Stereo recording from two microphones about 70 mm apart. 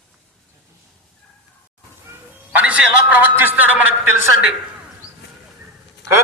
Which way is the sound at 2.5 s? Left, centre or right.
Centre.